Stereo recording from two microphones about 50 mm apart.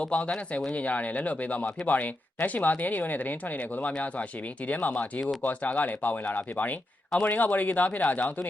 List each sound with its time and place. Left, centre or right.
0.0 s speech: left